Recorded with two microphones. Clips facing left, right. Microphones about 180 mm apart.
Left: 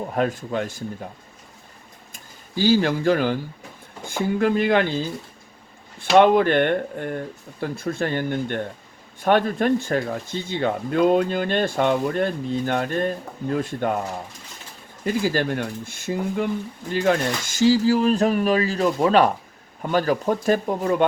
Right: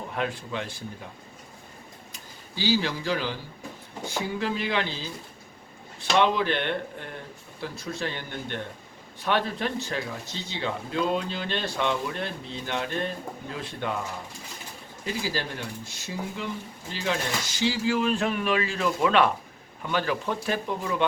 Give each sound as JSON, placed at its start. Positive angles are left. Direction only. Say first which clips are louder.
{"t": 0.1, "sound": "speech", "louder": "left 6 dB", "side_deg": 45}
{"t": 2.1, "sound": "speech", "louder": "left 9 dB", "side_deg": 50}
{"t": 15.0, "sound": "speech", "louder": "left 9 dB", "side_deg": 50}